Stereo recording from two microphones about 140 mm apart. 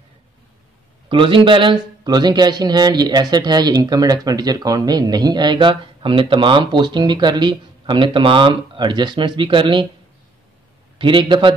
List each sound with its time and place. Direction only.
1.0 s a man's voice: 35° right (ahead or behind)
11.0 s a man's voice: 35° right (ahead or behind)